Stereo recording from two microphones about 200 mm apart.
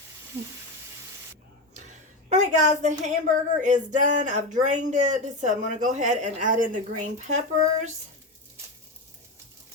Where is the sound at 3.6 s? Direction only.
40° right (ahead or behind).